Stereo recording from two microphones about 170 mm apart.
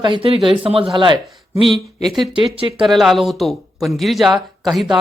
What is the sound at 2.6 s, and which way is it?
Speech, 30° right (ahead or behind).